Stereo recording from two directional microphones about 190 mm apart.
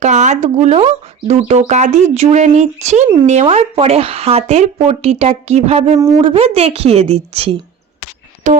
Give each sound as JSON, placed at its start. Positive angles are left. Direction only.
{"t": 0.0, "sound": "speech", "side_deg": -40}
{"t": 6.0, "sound": "speech", "side_deg": -20}
{"t": 6.3, "sound": "speech", "side_deg": -30}
{"t": 8.4, "sound": "speech", "side_deg": -40}